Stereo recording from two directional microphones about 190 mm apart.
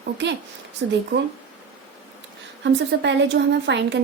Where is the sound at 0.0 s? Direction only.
65° right (ahead or behind).